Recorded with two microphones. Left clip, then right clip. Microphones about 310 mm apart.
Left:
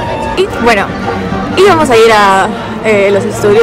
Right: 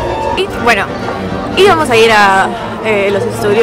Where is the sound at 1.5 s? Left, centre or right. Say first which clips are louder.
Left 2 dB; centre.